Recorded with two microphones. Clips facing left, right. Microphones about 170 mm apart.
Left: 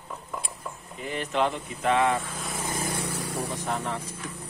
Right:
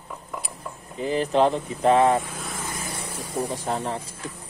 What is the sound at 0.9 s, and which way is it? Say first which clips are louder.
Speech: right 7 dB; 35° right (ahead or behind).